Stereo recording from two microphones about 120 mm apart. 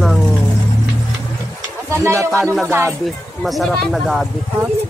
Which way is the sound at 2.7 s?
20° right (ahead or behind).